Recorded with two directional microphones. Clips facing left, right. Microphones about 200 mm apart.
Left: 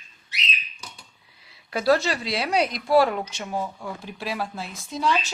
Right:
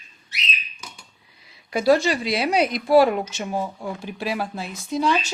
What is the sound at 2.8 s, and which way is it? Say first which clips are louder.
Speech: right 4 dB; 15° right (ahead or behind).